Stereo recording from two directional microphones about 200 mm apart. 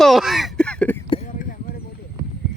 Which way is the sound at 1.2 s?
45° left (ahead or behind).